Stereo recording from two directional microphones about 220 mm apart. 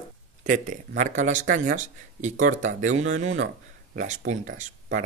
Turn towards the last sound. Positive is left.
turn(degrees=-35)  # may be behind; listen again after turning